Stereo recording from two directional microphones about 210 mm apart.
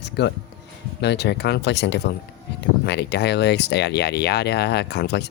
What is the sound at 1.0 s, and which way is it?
Speech, 55° left (ahead or behind).